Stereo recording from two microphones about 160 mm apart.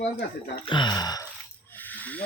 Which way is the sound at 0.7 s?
30° left (ahead or behind).